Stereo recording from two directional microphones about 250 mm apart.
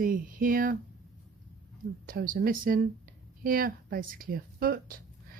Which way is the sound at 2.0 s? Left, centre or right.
Right.